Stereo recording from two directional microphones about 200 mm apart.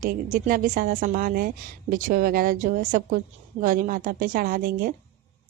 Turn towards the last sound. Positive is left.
turn(degrees=-45)  # may be behind; listen again after turning